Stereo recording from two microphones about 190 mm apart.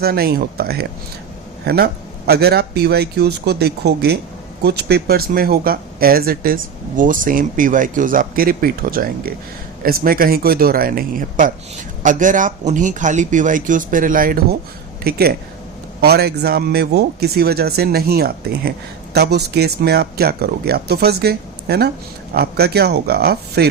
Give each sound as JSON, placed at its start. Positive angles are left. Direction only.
{"t": 0.0, "sound": "speech", "side_deg": -55}